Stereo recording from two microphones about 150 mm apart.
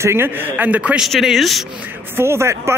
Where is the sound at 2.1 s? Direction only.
15° right (ahead or behind).